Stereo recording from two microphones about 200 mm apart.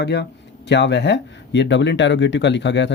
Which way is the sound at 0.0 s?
55° left (ahead or behind).